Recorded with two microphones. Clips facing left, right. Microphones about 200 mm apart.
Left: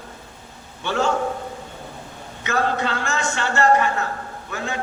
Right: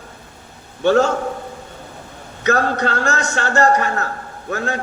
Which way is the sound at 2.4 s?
40° right (ahead or behind).